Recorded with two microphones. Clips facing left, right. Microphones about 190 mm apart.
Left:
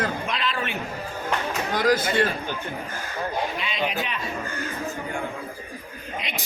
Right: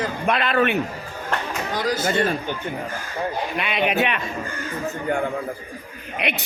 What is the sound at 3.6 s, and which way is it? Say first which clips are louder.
Speech: right 6 dB; 65° right (ahead or behind).